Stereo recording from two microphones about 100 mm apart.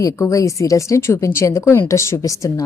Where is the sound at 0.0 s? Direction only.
35° left (ahead or behind).